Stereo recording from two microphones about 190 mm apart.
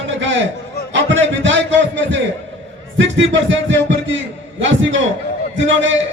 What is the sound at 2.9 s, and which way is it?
A man's voice, 75° right (ahead or behind).